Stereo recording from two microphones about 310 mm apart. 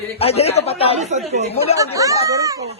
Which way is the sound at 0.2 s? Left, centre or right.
Centre.